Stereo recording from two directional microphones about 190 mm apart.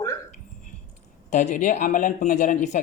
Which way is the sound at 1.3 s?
40° left (ahead or behind).